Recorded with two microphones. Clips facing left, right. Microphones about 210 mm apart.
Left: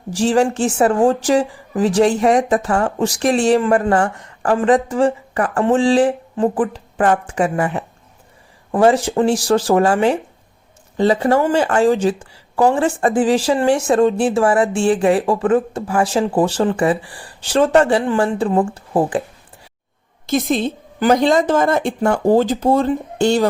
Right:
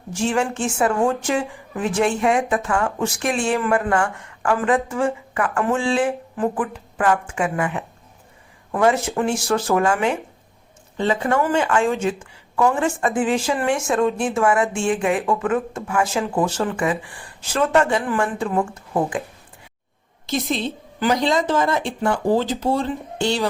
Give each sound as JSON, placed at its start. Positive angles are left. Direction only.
{"t": 0.1, "sound": "speech", "side_deg": 35}
{"t": 20.2, "sound": "a woman's voice", "side_deg": 50}